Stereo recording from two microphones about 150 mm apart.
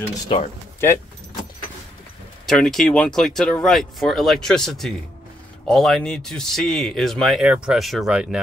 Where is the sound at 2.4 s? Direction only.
Centre (ahead or behind).